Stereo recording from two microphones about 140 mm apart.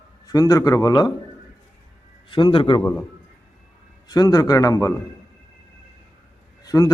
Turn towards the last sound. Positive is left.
turn(degrees=25)  # may be behind; listen again after turning